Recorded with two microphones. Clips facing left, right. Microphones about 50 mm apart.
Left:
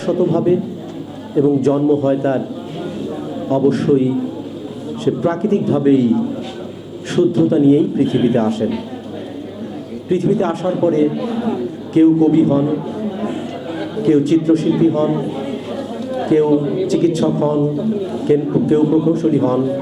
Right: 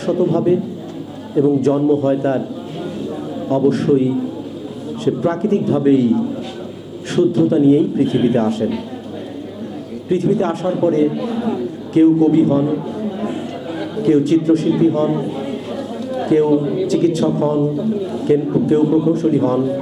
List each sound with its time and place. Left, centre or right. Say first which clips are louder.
0.2 s a man's voice: even; left
1.7 s a man's voice: left 1 dB; left
3.7 s a man's voice: even; centre
5.0 s a man's voice: left 1 dB; left
10.1 s a man's voice: left 1 dB; left
12.7 s a sound: left 1 dB; left
16.6 s a man's voice: even; left
19.1 s a man's voice: left 1 dB; centre
19.4 s a man's voice: left 1 dB; left